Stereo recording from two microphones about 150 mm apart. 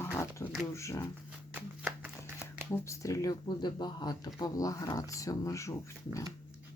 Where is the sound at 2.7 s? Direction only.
20° left (ahead or behind).